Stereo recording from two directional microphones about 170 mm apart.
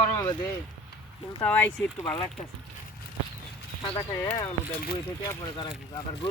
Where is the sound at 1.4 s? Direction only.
10° left (ahead or behind).